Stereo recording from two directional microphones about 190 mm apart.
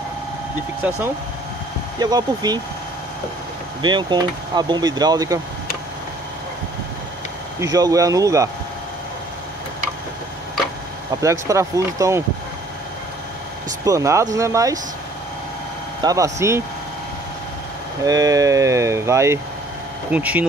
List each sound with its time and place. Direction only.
2.0 s speech: 20° right (ahead or behind)
3.8 s speech: 25° right (ahead or behind)
7.6 s speech: 20° right (ahead or behind)
11.1 s speech: 15° right (ahead or behind)
13.8 s speech: 15° right (ahead or behind)
16.0 s speech: 20° right (ahead or behind)
18.0 s speech: 20° right (ahead or behind)